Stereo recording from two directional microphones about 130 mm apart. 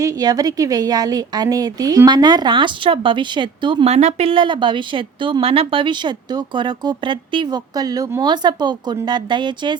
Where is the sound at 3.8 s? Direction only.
55° right (ahead or behind).